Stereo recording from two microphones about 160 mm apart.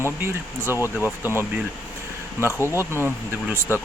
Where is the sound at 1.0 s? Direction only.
15° right (ahead or behind).